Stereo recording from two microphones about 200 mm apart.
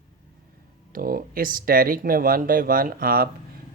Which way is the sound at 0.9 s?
45° right (ahead or behind).